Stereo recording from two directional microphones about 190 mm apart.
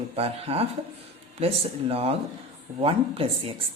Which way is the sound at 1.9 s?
30° right (ahead or behind).